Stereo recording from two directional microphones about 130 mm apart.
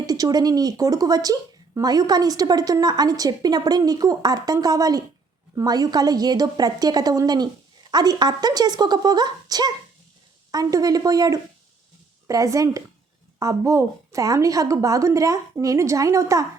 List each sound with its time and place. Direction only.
0.0 s a woman's voice: 30° right (ahead or behind)